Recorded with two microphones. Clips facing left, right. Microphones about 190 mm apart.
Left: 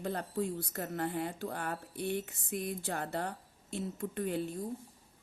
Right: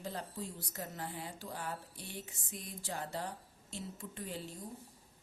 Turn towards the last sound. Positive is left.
turn(degrees=55)  # may be behind; listen again after turning